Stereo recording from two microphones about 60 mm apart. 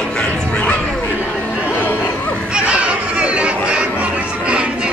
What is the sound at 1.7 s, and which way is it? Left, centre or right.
Music, left.